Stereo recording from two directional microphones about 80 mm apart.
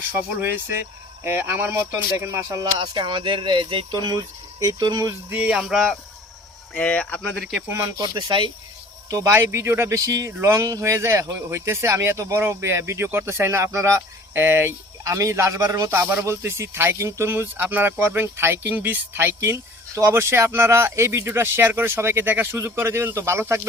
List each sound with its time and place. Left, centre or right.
0.1 s speech: right
2.1 s speech: right
2.7 s speech: right
3.9 s speech: right
5.4 s speech: centre
5.6 s speech: centre
6.7 s speech: centre
7.7 s speech: right
7.9 s speech: right
9.0 s speech: right
9.3 s speech: right
15.0 s speech: right